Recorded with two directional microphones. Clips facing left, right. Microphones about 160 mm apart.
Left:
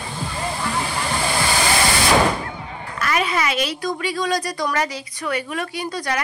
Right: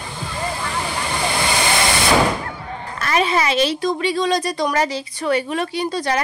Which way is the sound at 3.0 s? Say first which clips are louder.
Right 3 dB; 30° right (ahead or behind).